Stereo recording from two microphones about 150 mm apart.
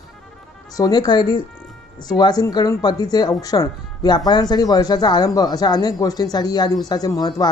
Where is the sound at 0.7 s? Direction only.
25° left (ahead or behind).